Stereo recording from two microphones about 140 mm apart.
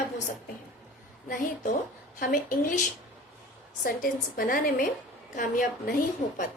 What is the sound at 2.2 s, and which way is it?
Speech, 75° left (ahead or behind).